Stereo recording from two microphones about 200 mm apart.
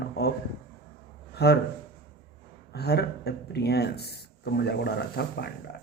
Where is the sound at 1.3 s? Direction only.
55° left (ahead or behind).